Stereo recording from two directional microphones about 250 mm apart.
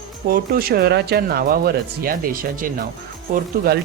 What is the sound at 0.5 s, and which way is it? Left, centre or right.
Speech, right.